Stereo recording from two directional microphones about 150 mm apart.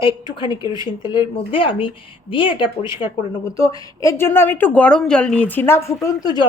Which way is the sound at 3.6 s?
20° left (ahead or behind).